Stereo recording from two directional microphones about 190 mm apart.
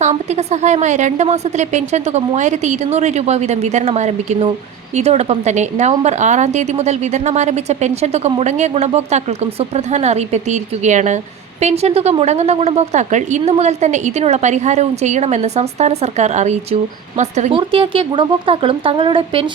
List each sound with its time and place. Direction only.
0.0 s a woman's voice: 35° right (ahead or behind)